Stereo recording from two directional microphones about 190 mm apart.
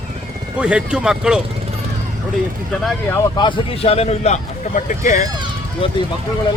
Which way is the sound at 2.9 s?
10° left (ahead or behind).